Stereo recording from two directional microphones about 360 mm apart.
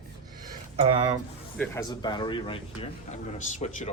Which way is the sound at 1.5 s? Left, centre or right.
Centre.